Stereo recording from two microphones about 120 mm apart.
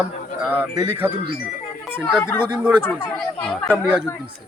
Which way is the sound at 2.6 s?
10° right (ahead or behind).